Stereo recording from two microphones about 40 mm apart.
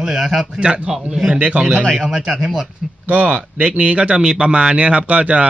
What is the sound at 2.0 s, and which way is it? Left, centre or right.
Speech, centre.